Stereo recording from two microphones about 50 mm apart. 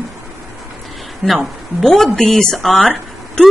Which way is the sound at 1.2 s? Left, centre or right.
Centre.